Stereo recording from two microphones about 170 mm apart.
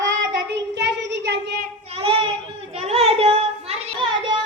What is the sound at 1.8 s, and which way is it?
Child singing, 35° right (ahead or behind).